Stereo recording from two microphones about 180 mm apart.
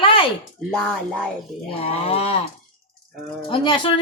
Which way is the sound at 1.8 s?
30° left (ahead or behind).